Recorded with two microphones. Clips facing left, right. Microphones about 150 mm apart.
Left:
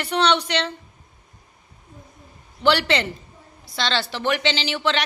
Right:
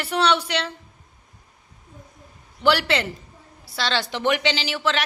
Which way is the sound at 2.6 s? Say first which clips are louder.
Left 1 dB; 10° right (ahead or behind).